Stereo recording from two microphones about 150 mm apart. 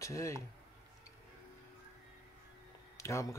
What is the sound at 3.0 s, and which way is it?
Speech, 20° left (ahead or behind).